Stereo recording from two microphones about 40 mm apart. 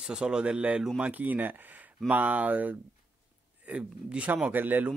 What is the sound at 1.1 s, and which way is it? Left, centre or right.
Speech, right.